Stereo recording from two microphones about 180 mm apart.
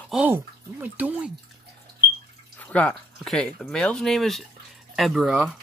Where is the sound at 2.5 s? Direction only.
10° left (ahead or behind).